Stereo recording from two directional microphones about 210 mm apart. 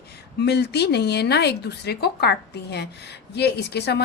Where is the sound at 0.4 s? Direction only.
50° left (ahead or behind).